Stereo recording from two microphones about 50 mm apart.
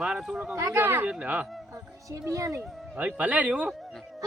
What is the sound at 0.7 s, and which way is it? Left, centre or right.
Speech, right.